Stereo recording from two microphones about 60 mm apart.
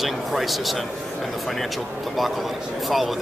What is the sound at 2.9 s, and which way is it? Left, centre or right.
Speech, centre.